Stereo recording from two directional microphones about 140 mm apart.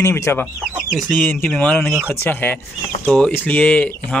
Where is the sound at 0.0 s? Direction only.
20° left (ahead or behind).